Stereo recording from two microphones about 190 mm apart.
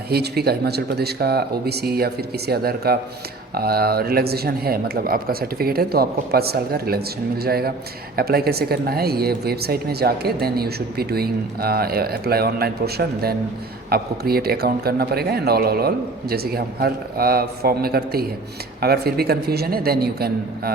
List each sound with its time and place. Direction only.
0.1 s a woman's voice: 55° right (ahead or behind)